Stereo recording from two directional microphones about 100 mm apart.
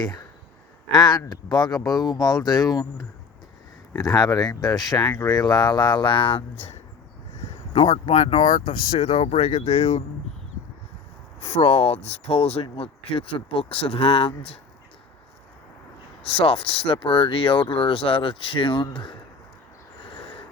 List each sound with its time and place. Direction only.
0.9 s speech: 45° left (ahead or behind); by 6.4 s 60° left (ahead or behind)
7.7 s speech: 90° left
11.4 s speech: 85° left
12.6 s speech: 70° left (ahead or behind)
16.2 s speech: 70° left (ahead or behind)